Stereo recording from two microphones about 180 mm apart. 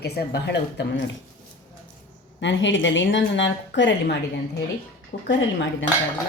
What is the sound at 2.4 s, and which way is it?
Speech, 90° left.